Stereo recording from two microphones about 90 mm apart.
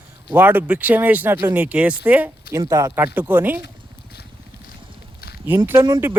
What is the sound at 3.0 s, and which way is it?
Speech, 20° right (ahead or behind).